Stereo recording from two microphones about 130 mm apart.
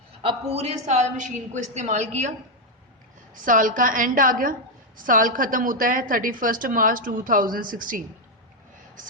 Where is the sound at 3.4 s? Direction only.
90° right.